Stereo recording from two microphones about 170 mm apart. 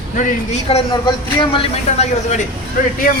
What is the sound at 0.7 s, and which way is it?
Speech, 35° left (ahead or behind).